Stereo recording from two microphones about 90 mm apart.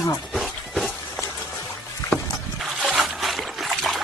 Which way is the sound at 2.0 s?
40° left (ahead or behind).